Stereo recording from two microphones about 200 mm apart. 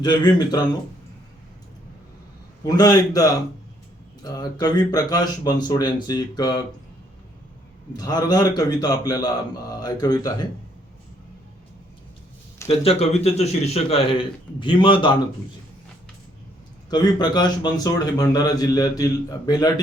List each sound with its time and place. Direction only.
0.0 s a man's voice: 20° left (ahead or behind)
2.6 s a man's voice: 20° left (ahead or behind)
7.9 s a man's voice: 20° left (ahead or behind)
12.6 s a man's voice: 30° left (ahead or behind)
16.9 s a man's voice: 20° left (ahead or behind)